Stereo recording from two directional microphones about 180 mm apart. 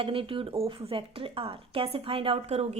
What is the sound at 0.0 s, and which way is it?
A woman's voice, 30° right (ahead or behind).